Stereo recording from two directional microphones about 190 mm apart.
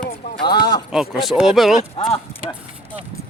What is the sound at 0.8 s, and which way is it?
Speech, centre (ahead or behind).